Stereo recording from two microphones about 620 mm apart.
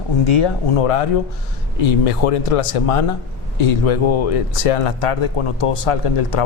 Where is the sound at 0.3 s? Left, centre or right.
Left.